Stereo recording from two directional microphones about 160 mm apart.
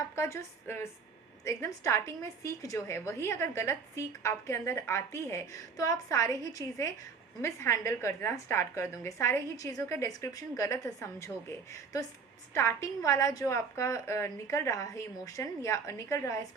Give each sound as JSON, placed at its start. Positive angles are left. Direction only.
{"t": 0.2, "sound": "a woman's voice", "side_deg": 15}
{"t": 12.5, "sound": "a woman's voice", "side_deg": 20}